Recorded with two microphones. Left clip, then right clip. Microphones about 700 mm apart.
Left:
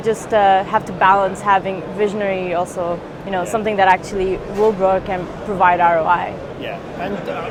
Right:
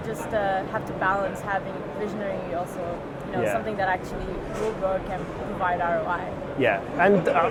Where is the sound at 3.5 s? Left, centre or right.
Left.